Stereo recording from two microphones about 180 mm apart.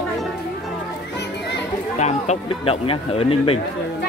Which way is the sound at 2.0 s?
40° left (ahead or behind).